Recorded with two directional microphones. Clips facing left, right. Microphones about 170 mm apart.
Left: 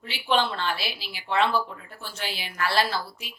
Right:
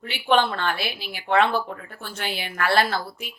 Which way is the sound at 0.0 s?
55° right (ahead or behind).